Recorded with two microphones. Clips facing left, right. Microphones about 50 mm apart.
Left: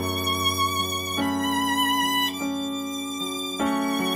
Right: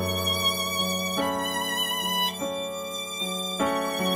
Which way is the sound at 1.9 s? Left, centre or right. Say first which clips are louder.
Left 5 dB; left.